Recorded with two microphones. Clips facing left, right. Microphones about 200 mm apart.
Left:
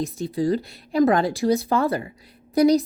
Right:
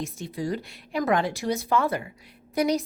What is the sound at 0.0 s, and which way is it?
A woman's voice, 35° left (ahead or behind).